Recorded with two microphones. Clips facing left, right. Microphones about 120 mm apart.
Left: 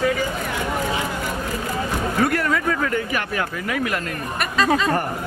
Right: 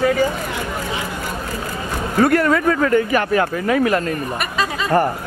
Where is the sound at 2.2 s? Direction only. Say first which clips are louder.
Right 6 dB; 50° right (ahead or behind).